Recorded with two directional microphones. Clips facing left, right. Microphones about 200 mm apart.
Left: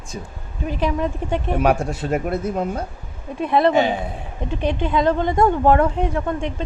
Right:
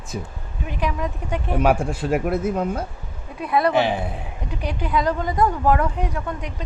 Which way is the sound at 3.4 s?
25° left (ahead or behind).